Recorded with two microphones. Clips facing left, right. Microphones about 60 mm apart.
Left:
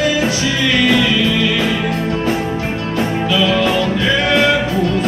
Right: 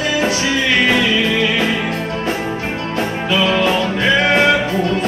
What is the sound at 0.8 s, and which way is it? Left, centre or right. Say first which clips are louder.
Music: left 1 dB; right.